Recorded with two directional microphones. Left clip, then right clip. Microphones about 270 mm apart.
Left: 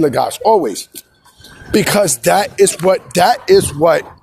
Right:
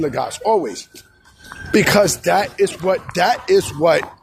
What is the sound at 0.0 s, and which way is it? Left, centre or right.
Speech, left.